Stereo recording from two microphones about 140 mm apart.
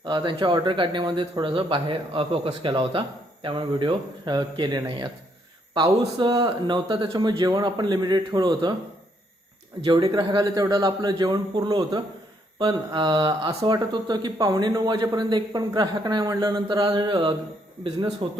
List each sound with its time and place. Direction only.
0.0 s a man's voice: 35° right (ahead or behind)
9.8 s a man's voice: 30° right (ahead or behind)
13.7 s a man's voice: 30° right (ahead or behind)